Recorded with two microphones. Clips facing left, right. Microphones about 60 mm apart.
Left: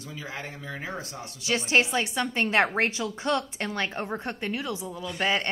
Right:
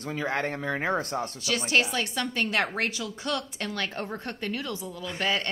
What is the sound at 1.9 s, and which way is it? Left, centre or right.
Speech, centre.